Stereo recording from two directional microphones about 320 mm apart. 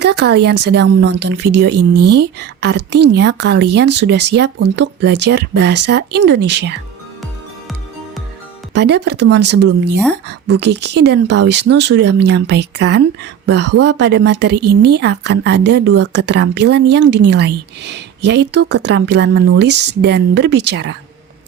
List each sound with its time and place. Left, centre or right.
0.0 s a woman's voice: right
8.7 s a woman's voice: right